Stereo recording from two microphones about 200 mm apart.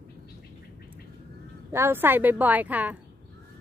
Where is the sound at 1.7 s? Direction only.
10° right (ahead or behind).